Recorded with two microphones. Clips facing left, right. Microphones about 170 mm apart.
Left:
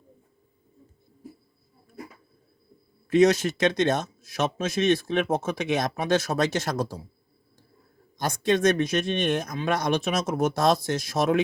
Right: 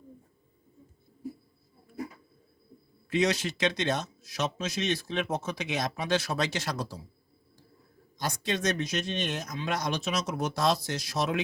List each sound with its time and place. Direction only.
3.1 s speech: 45° left (ahead or behind)
8.2 s speech: 50° left (ahead or behind)